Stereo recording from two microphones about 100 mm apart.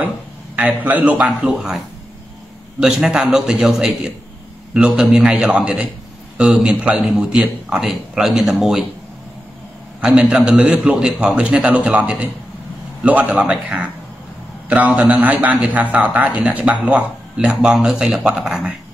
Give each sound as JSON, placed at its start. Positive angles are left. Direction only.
{"t": 0.6, "sound": "a man's voice", "side_deg": -15}
{"t": 2.8, "sound": "a man's voice", "side_deg": -5}
{"t": 9.9, "sound": "a man's voice", "side_deg": -10}